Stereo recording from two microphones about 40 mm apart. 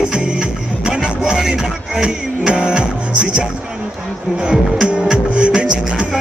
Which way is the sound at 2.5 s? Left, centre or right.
Right.